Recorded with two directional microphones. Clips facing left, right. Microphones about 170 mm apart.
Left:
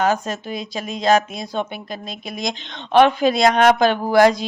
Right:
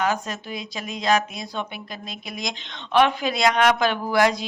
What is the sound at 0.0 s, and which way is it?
Speech, 40° left (ahead or behind).